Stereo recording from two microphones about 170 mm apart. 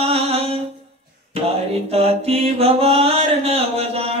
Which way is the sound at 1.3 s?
35° right (ahead or behind).